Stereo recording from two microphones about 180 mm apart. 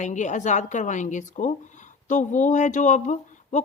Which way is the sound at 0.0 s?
45° left (ahead or behind).